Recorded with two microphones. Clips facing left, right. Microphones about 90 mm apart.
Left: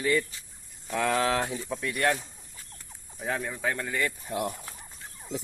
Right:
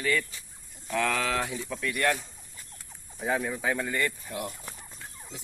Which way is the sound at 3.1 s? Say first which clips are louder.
Right 3 dB; 5° right (ahead or behind).